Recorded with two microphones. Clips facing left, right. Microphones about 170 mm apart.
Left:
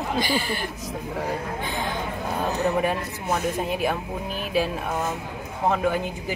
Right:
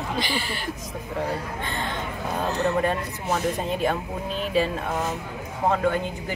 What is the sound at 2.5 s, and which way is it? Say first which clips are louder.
Speech: even; 15° left (ahead or behind).